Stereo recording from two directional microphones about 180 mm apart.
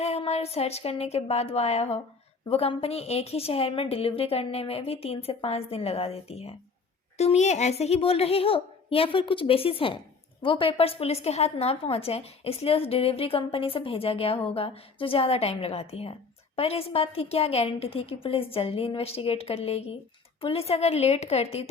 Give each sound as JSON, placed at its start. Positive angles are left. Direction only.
{"t": 0.0, "sound": "a woman's voice", "side_deg": 35}